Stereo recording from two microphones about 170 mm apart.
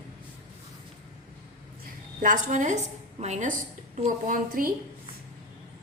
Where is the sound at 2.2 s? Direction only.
45° right (ahead or behind).